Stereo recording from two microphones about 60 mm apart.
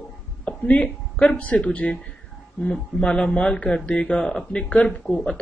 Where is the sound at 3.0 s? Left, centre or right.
Centre.